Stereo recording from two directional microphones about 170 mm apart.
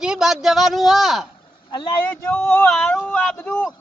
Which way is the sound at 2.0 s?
10° left (ahead or behind).